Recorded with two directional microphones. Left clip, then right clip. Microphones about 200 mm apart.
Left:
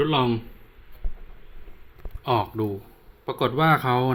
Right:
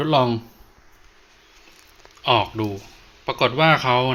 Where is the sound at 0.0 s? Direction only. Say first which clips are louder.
Right 4 dB; 5° right (ahead or behind).